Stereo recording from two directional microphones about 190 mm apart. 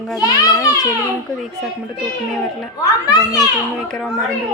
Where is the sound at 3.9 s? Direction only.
5° left (ahead or behind).